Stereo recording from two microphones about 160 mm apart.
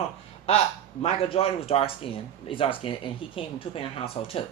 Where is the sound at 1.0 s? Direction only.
35° left (ahead or behind).